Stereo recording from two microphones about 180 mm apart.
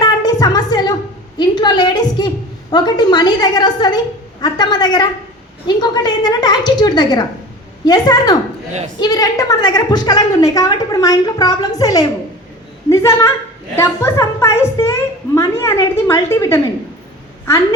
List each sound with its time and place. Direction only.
0.0 s music: 20° left (ahead or behind)
1.4 s a woman's voice: 25° left (ahead or behind)